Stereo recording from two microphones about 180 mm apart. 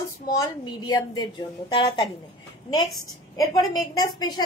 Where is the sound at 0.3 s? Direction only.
20° left (ahead or behind).